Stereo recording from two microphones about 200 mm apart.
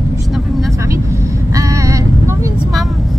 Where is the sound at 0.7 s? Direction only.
15° right (ahead or behind).